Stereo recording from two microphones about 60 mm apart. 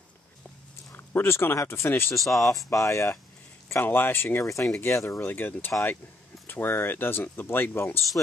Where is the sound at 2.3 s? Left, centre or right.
Left.